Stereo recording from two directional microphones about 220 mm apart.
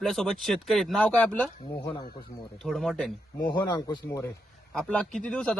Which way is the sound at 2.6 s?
Centre (ahead or behind).